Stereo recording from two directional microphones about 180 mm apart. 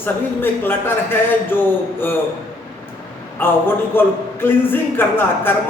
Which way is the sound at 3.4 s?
10° left (ahead or behind).